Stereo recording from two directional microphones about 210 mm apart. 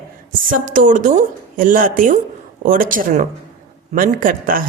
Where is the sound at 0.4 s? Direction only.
40° right (ahead or behind).